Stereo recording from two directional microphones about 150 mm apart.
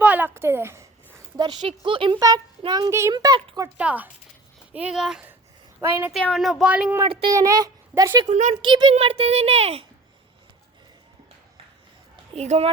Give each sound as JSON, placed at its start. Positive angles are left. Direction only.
{"t": 0.0, "sound": "a sound", "side_deg": -10}
{"t": 1.6, "sound": "a child's voice", "side_deg": -35}
{"t": 3.8, "sound": "speech", "side_deg": -10}
{"t": 7.1, "sound": "speech", "side_deg": -35}
{"t": 7.3, "sound": "speech", "side_deg": -25}
{"t": 8.3, "sound": "a child's voice", "side_deg": -55}
{"t": 8.6, "sound": "a child's voice", "side_deg": -30}
{"t": 12.3, "sound": "a child's voice", "side_deg": -45}